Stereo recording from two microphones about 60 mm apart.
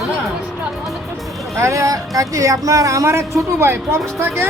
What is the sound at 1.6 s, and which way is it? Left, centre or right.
Speech, right.